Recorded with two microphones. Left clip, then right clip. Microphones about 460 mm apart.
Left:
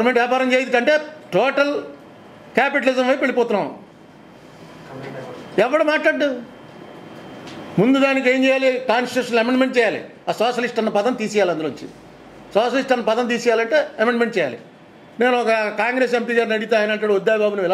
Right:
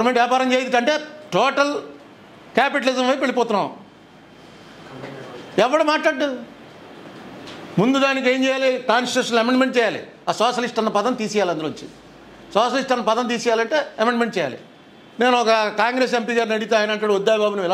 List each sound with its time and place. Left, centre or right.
0.0 s a man's voice: centre
5.6 s a man's voice: right
7.8 s a man's voice: right